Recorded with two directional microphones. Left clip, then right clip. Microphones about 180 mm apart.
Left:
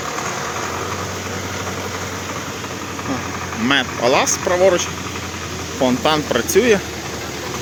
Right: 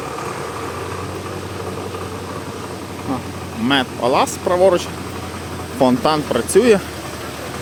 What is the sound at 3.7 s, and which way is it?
Speech, 5° right (ahead or behind).